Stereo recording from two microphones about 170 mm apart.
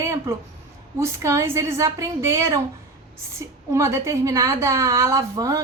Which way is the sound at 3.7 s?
15° right (ahead or behind).